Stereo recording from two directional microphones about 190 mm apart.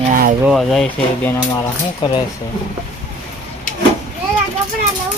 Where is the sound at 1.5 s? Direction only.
20° left (ahead or behind).